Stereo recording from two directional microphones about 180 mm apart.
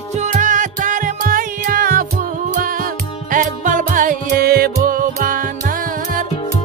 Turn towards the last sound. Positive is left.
turn(degrees=-50)  # may be behind; listen again after turning